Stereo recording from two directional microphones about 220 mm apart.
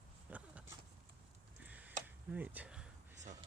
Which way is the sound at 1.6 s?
5° right (ahead or behind).